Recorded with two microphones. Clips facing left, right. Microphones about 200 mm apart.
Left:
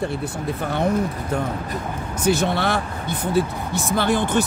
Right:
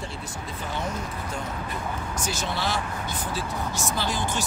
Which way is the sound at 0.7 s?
60° left (ahead or behind).